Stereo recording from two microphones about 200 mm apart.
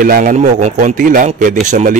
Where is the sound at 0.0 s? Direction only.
40° right (ahead or behind).